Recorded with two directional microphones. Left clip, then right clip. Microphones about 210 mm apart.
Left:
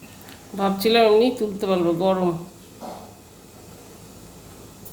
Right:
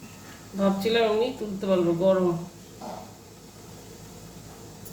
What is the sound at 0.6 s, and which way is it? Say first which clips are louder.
Speech: left 6 dB; 50° left (ahead or behind).